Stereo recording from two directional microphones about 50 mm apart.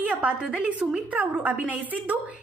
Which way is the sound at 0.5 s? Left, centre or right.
Right.